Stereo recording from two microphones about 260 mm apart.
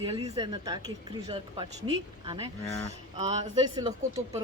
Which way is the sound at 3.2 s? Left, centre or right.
Centre.